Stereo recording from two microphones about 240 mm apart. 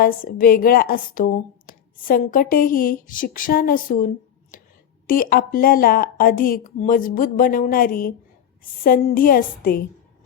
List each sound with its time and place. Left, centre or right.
0.0 s a woman's voice: left
4.5 s a sound: left
5.0 s a woman's voice: left